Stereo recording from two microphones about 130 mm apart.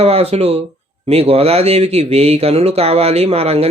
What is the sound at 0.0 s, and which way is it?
Speech, 50° right (ahead or behind).